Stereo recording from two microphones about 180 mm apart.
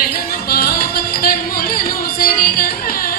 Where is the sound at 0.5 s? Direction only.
55° left (ahead or behind).